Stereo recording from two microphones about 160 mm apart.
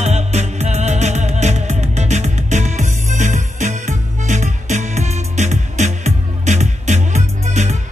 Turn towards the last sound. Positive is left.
turn(degrees=-45)  # may be behind; listen again after turning